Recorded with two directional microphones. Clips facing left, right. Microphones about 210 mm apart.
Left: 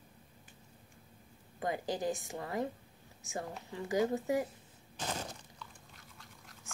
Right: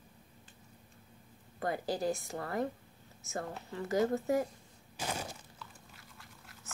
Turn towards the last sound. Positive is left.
turn(degrees=-10)  # may be behind; listen again after turning